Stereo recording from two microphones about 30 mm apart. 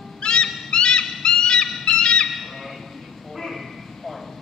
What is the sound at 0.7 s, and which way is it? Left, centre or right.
Music, left.